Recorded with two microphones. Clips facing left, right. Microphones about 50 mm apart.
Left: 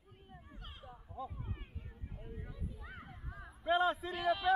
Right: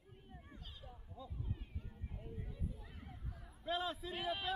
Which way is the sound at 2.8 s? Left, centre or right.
Left.